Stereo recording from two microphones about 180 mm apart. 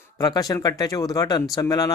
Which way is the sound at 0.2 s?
20° left (ahead or behind).